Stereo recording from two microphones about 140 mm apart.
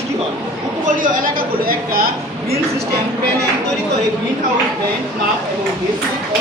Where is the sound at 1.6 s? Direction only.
90° right.